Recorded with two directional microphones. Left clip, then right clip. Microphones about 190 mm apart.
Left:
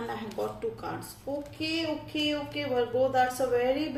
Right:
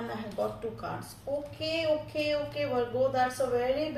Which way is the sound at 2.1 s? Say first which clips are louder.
Even; 35° left (ahead or behind).